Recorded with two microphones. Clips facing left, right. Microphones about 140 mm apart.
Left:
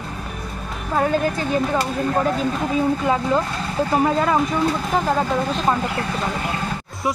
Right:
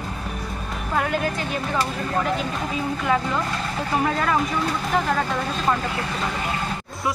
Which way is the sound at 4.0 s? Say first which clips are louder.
Left 3 dB; 25° left (ahead or behind).